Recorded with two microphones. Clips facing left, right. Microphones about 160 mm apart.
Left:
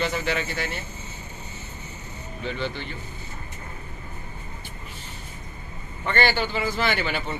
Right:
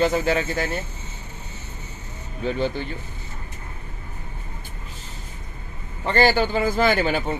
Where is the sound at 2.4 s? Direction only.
45° right (ahead or behind).